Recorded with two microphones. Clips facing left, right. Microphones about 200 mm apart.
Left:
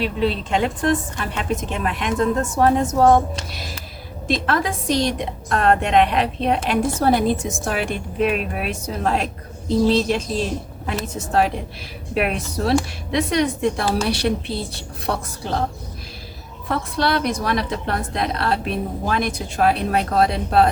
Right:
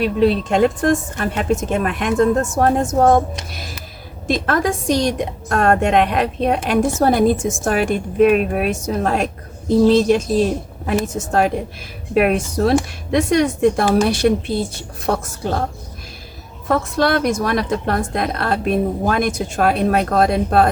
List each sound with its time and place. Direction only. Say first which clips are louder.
0.0 s a woman's voice: right 6 dB; 45° right (ahead or behind)
4.3 s a woman's voice: right 3 dB; 50° right (ahead or behind)
16.6 s a woman's voice: right 5 dB; 45° right (ahead or behind)